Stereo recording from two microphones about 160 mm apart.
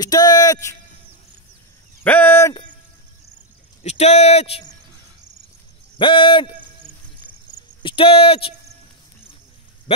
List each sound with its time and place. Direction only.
0.0 s speech: 25° left (ahead or behind)
2.0 s speech: 10° left (ahead or behind)
3.8 s speech: 45° left (ahead or behind)
5.9 s a man's voice: 30° left (ahead or behind)
7.8 s speech: 35° left (ahead or behind)
9.9 s speech: 35° left (ahead or behind)